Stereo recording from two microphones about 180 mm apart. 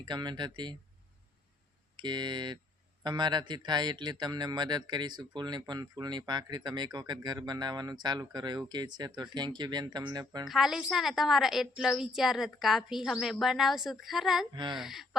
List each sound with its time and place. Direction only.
0.0 s speech: 25° right (ahead or behind)
2.0 s speech: 25° right (ahead or behind)
10.5 s a woman's voice: centre (ahead or behind)
14.5 s speech: 25° right (ahead or behind)
14.8 s a woman's voice: centre (ahead or behind)